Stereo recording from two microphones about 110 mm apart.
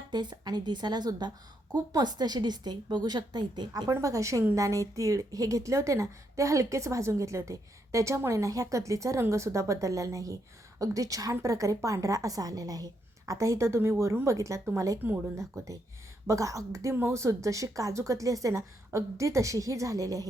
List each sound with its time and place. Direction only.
0.1 s a woman's voice: 40° right (ahead or behind)
3.9 s a woman's voice: 30° right (ahead or behind)